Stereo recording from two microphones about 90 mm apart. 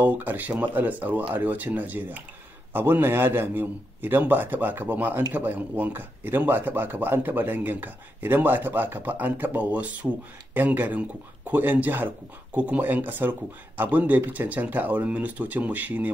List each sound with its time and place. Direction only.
0.0 s speech: 20° right (ahead or behind)